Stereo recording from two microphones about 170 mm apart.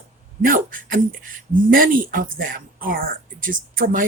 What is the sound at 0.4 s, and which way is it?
Speech, 55° right (ahead or behind).